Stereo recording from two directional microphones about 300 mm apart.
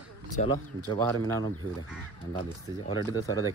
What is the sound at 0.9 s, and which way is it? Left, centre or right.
Speech, centre.